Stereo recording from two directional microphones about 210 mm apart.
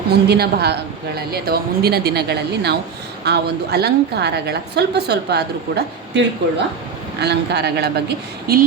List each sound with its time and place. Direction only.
0.1 s a woman's voice: 50° right (ahead or behind)